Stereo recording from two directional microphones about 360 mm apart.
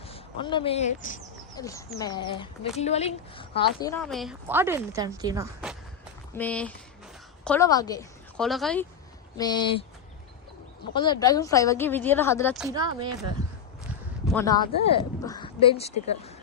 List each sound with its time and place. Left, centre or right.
0.0 s speech: centre
1.5 s speech: centre
3.8 s a woman's voice: centre
6.3 s a woman's voice: centre
10.9 s speech: centre
12.6 s speech: centre
14.3 s speech: centre